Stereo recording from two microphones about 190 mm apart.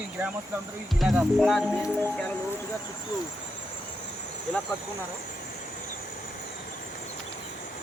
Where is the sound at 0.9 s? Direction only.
Centre (ahead or behind).